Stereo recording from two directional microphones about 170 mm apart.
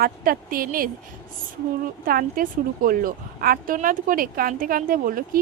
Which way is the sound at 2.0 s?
55° right (ahead or behind).